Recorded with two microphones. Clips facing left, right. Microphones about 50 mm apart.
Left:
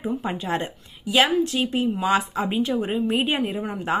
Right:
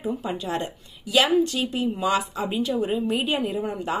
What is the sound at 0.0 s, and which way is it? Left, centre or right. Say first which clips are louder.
Speech: left 1 dB; left.